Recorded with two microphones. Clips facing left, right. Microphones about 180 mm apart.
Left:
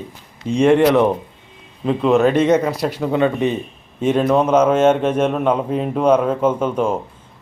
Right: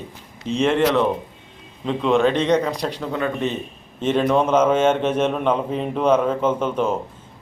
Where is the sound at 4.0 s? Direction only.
5° left (ahead or behind).